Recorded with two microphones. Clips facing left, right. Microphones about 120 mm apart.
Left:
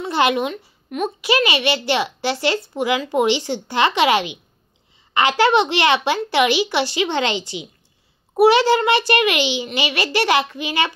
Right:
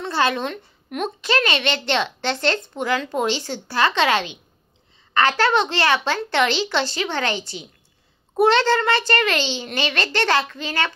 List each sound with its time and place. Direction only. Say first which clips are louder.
0.1 s speech: left 3 dB; 15° left (ahead or behind)
0.5 s a woman's voice: left 2 dB; 5° left (ahead or behind)